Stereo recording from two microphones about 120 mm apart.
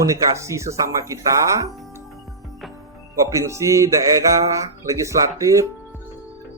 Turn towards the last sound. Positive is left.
turn(degrees=-25)  # may be behind; listen again after turning